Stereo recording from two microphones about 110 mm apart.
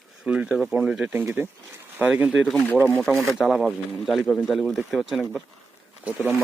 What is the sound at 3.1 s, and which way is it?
Speech, centre (ahead or behind).